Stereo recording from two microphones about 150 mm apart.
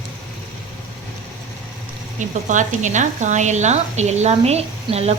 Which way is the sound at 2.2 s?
55° right (ahead or behind).